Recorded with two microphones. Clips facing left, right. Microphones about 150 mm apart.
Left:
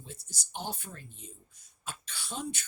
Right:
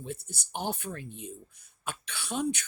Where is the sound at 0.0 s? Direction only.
60° right (ahead or behind).